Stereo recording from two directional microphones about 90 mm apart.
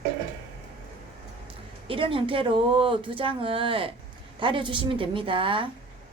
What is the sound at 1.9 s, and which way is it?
Speech, 80° right.